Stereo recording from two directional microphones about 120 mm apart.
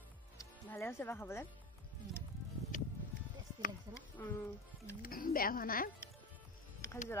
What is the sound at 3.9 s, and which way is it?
Speech, 30° right (ahead or behind).